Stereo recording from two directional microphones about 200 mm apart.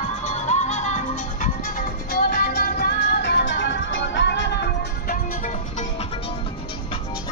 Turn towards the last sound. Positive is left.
turn(degrees=40)  # may be behind; listen again after turning